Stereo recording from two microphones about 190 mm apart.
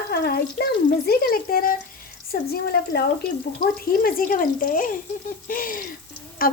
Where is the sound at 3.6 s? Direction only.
50° left (ahead or behind).